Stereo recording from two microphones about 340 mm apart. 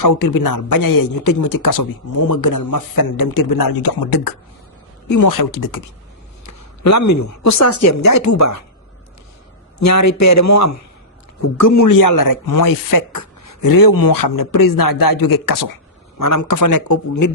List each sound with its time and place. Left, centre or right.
0.0 s a man's voice: left
5.0 s a man's voice: left
6.4 s a woman's voice: left
9.7 s a man's voice: left
16.2 s a man's voice: left